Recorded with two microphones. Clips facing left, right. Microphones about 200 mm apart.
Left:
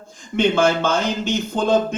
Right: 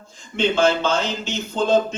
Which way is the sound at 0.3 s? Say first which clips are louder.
Left 2 dB; 55° left (ahead or behind).